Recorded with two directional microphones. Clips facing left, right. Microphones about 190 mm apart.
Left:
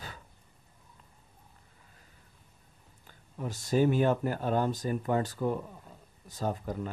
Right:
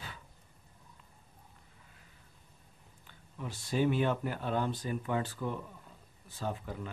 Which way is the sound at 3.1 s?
45° left (ahead or behind).